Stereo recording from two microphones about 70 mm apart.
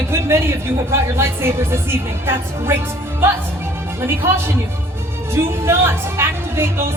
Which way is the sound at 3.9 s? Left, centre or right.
Right.